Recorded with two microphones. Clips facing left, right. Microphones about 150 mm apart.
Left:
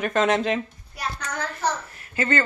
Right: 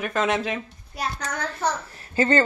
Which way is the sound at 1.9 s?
30° right (ahead or behind).